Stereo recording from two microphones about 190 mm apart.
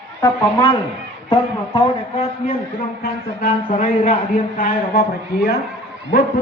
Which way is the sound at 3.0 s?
45° left (ahead or behind).